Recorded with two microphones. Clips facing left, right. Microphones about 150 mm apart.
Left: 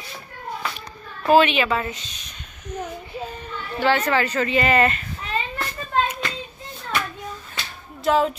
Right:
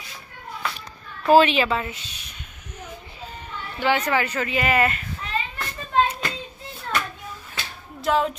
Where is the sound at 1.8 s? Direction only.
10° right (ahead or behind).